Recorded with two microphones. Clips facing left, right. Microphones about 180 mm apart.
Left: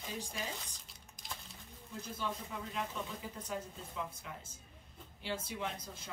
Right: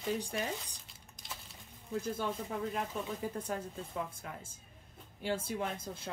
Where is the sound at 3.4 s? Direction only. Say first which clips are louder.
Right 3 dB; 50° right (ahead or behind).